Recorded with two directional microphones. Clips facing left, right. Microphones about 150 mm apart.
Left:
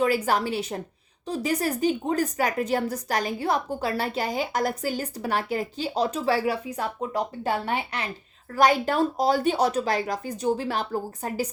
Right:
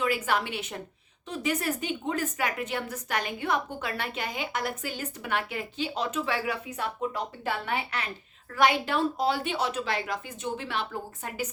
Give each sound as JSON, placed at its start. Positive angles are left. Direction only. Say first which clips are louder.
{"t": 0.0, "sound": "a woman's voice", "louder": "left 5 dB", "side_deg": 40}